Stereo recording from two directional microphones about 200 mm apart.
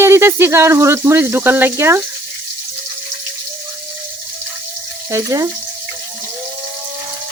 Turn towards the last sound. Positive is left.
turn(degrees=-15)  # may be behind; listen again after turning